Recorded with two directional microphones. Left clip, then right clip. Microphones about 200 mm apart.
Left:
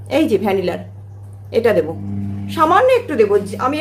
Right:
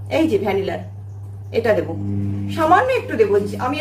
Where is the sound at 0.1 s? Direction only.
55° left (ahead or behind).